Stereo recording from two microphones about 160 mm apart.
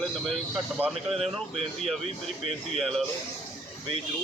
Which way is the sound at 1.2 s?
40° right (ahead or behind).